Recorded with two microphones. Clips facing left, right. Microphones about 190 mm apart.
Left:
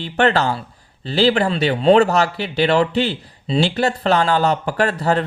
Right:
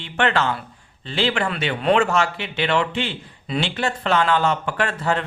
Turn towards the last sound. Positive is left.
turn(degrees=40)  # may be behind; listen again after turning